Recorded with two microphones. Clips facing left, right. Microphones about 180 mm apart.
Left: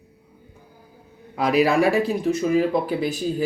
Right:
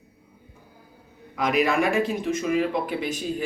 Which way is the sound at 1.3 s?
35° left (ahead or behind).